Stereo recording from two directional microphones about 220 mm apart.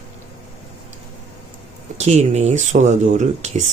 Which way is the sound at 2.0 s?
30° right (ahead or behind).